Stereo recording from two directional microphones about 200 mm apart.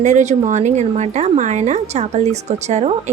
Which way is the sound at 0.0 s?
35° right (ahead or behind).